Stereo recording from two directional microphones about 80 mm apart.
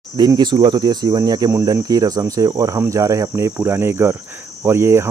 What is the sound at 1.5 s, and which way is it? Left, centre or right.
Speech, right.